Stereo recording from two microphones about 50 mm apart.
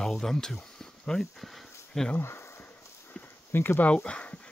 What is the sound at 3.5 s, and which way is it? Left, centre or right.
Speech, left.